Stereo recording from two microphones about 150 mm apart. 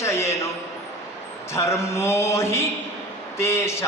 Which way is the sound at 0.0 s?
20° left (ahead or behind).